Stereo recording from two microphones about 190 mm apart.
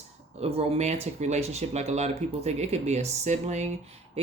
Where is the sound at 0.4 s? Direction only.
35° right (ahead or behind).